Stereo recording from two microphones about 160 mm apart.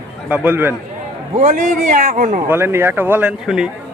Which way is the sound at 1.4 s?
50° right (ahead or behind).